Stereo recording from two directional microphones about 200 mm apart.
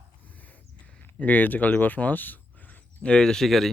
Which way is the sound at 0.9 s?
10° left (ahead or behind).